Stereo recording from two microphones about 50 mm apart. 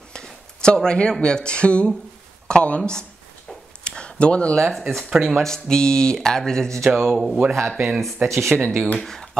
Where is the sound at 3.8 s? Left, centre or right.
Left.